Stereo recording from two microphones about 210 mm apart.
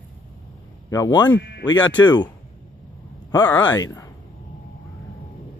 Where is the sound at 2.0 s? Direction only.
20° left (ahead or behind).